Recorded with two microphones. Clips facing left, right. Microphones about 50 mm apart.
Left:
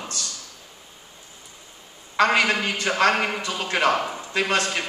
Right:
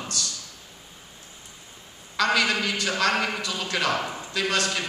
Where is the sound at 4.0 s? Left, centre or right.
Centre.